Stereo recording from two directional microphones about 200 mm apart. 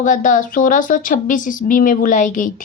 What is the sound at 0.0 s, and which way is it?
A woman's voice, 40° left (ahead or behind).